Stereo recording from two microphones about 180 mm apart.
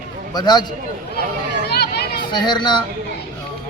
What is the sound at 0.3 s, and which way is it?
Speech, 25° left (ahead or behind).